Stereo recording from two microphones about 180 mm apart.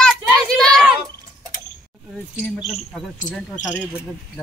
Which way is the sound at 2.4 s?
Centre (ahead or behind).